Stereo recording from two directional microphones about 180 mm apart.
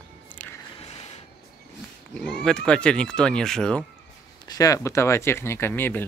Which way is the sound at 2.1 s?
5° left (ahead or behind).